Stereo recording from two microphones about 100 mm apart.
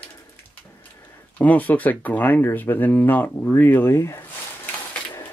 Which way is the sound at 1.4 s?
15° left (ahead or behind).